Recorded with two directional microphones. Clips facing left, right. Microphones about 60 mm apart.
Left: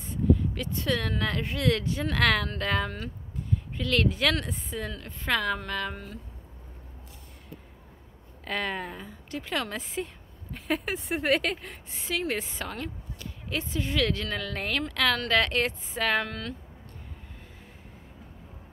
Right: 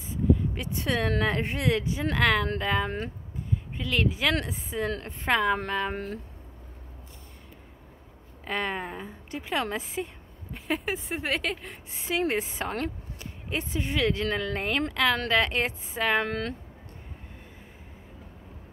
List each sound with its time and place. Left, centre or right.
0.1 s a sound: centre
1.2 s a woman's voice: right
1.7 s a woman's voice: centre
4.9 s a woman's voice: right
8.5 s a woman's voice: centre
10.5 s speech: centre
11.9 s a woman's voice: right
16.3 s speech: right